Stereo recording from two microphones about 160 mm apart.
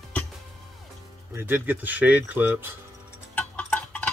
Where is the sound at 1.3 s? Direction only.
15° right (ahead or behind).